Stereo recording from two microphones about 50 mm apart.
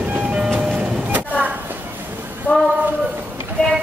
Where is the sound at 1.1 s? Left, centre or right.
Right.